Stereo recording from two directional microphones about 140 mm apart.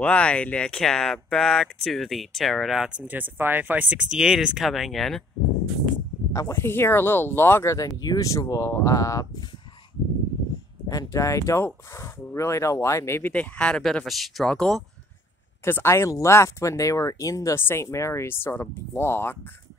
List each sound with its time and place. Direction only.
0.0 s speech: 10° left (ahead or behind)
6.4 s speech: 15° left (ahead or behind)
10.9 s speech: 25° left (ahead or behind); by 14.8 s 5° left (ahead or behind)
15.6 s speech: 20° left (ahead or behind)